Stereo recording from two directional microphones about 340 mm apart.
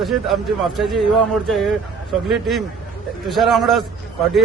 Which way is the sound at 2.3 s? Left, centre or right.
Centre.